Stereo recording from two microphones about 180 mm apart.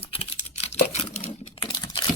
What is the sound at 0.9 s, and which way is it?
Crumpling, 35° left (ahead or behind).